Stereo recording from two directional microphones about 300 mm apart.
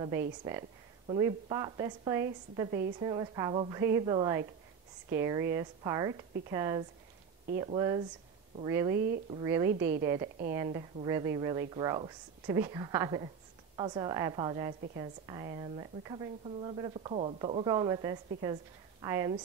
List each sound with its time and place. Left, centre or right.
0.5 s speech: centre
8.9 s a woman's voice: right
9.3 s speech: centre
9.7 s a woman's voice: right
10.0 s speech: centre